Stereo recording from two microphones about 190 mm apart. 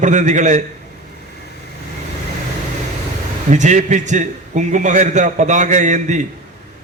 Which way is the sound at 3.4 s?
40° right (ahead or behind).